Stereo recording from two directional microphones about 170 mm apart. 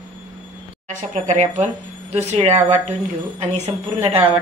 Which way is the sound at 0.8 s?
45° right (ahead or behind).